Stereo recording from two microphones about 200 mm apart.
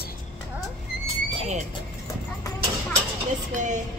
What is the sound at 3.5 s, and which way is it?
Music, 40° right (ahead or behind).